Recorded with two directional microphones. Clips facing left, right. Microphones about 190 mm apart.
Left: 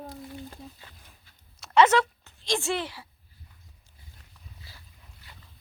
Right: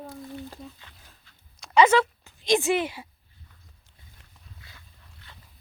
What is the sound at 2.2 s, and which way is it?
Speech, 15° right (ahead or behind).